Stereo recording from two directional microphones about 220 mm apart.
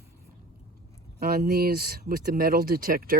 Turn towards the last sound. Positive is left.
turn(degrees=-40)  # may be behind; listen again after turning